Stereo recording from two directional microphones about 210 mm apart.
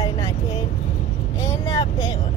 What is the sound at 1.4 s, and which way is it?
Speech, 15° left (ahead or behind).